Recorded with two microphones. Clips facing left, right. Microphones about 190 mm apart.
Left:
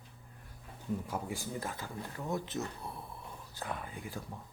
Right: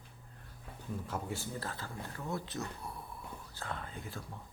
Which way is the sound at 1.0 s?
10° left (ahead or behind).